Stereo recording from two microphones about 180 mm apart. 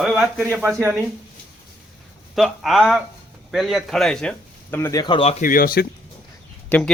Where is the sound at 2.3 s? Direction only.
Centre (ahead or behind); by 5.3 s 30° left (ahead or behind).